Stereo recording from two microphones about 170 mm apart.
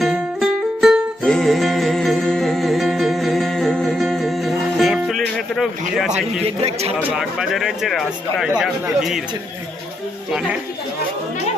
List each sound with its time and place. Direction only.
0.0 s music: 5° right (ahead or behind)
6.4 s a man's voice: 35° right (ahead or behind)
7.1 s speech: 5° right (ahead or behind)